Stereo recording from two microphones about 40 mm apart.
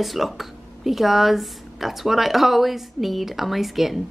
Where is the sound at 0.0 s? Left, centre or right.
Centre.